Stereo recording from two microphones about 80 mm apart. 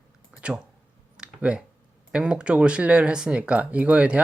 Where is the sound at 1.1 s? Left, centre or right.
Centre.